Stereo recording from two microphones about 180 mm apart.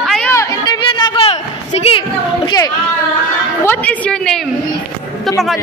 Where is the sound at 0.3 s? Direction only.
20° left (ahead or behind).